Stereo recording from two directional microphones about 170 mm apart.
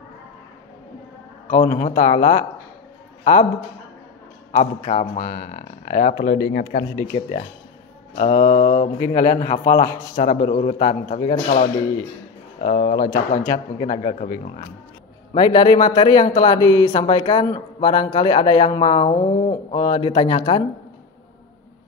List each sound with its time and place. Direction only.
1.5 s speech: 50° left (ahead or behind)
4.5 s speech: 50° left (ahead or behind); by 6.7 s 90° left
8.2 s speech: 50° left (ahead or behind)
10.5 s speech: 40° left (ahead or behind)
10.9 s speech: 55° left (ahead or behind)
12.5 s speech: 55° left (ahead or behind)
15.3 s speech: 30° left (ahead or behind)